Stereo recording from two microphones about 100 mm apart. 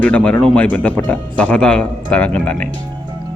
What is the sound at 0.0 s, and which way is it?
Speech, 15° left (ahead or behind).